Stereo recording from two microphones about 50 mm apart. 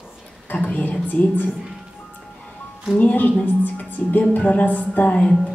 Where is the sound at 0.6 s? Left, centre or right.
Left.